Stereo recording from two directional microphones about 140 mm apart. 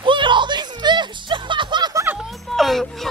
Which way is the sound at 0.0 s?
35° right (ahead or behind).